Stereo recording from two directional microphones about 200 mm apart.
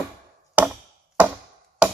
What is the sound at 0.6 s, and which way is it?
Chop, 10° right (ahead or behind).